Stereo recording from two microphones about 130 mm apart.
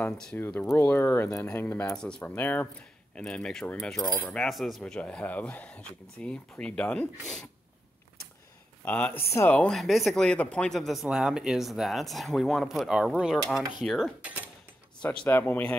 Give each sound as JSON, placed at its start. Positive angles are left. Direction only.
{"t": 0.0, "sound": "speech", "side_deg": 10}
{"t": 8.8, "sound": "speech", "side_deg": 10}